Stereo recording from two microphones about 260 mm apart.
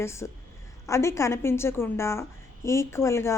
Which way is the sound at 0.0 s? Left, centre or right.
Centre.